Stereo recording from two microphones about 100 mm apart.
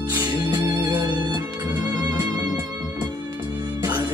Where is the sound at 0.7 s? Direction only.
45° right (ahead or behind).